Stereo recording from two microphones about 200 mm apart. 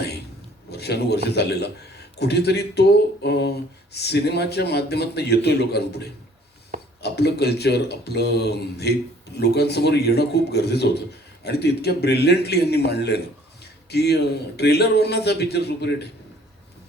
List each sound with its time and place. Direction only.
0.7 s a man's voice: 55° left (ahead or behind)